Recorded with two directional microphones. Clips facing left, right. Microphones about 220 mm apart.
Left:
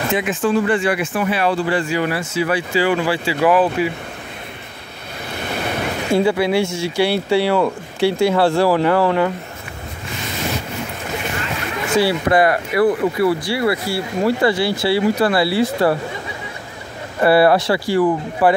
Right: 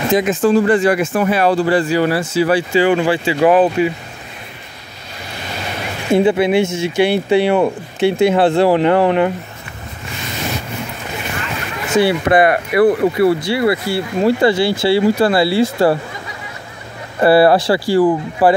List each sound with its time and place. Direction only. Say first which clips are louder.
0.1 s speech: right 6 dB; 40° right (ahead or behind); by 3.9 s 25° right (ahead or behind)
6.1 s speech: right 4 dB; 20° right (ahead or behind)
11.9 s speech: right 3 dB; 20° right (ahead or behind)
17.2 s speech: right 3 dB; 30° right (ahead or behind)